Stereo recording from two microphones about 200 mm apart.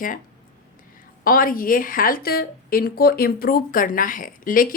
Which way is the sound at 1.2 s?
45° left (ahead or behind).